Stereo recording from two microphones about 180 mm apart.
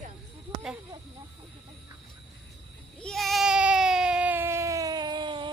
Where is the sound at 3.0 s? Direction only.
Centre (ahead or behind).